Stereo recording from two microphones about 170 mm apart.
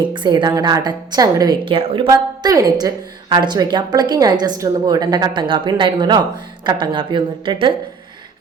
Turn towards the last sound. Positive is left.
turn(degrees=-30)  # may be behind; listen again after turning